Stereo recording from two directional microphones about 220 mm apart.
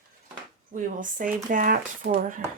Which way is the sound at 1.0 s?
35° right (ahead or behind).